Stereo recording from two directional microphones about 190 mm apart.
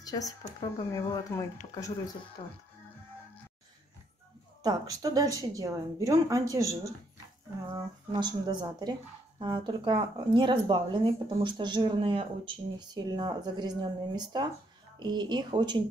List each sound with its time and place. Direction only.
0.0 s speech: 20° left (ahead or behind)
4.6 s speech: 20° right (ahead or behind)